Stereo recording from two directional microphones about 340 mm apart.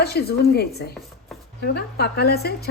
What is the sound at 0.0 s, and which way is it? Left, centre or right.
Speech, left.